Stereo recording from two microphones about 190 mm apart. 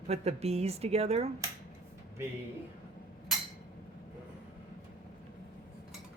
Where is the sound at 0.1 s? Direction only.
35° right (ahead or behind).